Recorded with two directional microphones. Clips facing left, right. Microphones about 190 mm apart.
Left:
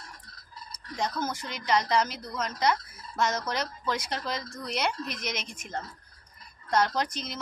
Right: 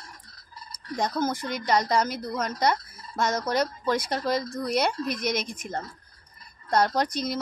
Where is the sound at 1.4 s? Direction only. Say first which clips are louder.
Right 3 dB; 45° right (ahead or behind).